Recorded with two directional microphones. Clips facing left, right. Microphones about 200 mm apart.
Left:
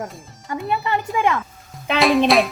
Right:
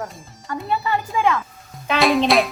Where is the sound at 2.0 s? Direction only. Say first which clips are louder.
Left 1 dB; centre (ahead or behind).